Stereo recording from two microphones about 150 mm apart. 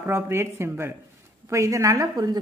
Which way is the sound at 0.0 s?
15° right (ahead or behind).